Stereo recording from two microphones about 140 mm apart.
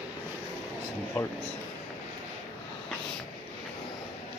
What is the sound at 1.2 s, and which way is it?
Speech, 15° left (ahead or behind).